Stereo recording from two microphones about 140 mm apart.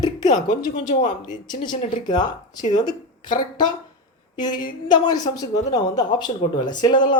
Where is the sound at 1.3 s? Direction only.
30° left (ahead or behind).